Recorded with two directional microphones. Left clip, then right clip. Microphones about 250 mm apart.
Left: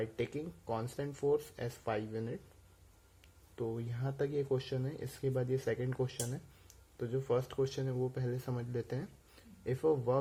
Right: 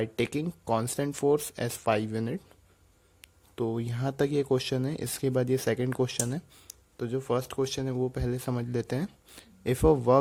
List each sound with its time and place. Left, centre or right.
0.0 s speech: right